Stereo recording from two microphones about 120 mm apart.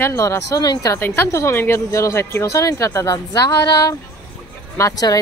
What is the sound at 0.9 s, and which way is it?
Speech, 15° left (ahead or behind).